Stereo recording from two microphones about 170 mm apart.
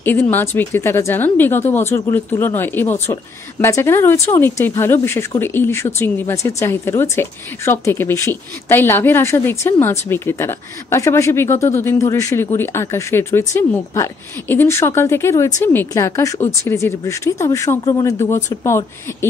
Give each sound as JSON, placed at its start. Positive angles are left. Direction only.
{"t": 0.0, "sound": "speech", "side_deg": 10}